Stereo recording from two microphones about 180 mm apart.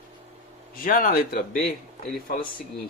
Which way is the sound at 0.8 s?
50° left (ahead or behind).